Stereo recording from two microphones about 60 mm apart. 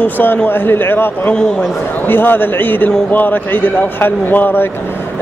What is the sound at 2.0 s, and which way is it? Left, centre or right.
Speech, left.